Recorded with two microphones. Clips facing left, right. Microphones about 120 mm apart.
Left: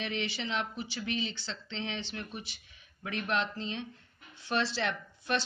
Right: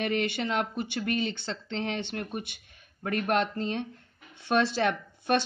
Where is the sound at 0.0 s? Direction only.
50° right (ahead or behind).